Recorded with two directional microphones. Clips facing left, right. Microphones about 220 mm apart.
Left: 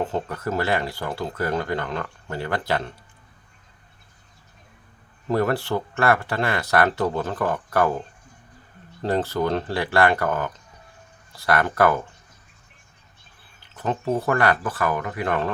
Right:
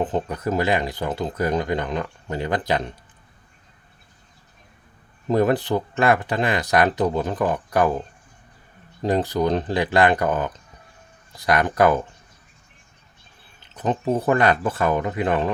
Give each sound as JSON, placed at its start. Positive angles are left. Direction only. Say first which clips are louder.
{"t": 0.0, "sound": "speech", "louder": "right 2 dB", "side_deg": -15}
{"t": 5.3, "sound": "speech", "louder": "right 3 dB", "side_deg": -20}
{"t": 9.0, "sound": "speech", "louder": "right 2 dB", "side_deg": -15}
{"t": 13.6, "sound": "speech", "louder": "right 3 dB", "side_deg": -20}